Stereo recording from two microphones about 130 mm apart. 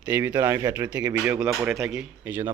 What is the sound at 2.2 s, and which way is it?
Speech, 15° right (ahead or behind).